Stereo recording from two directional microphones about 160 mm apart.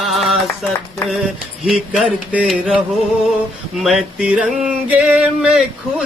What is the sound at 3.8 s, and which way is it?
Speech, centre (ahead or behind).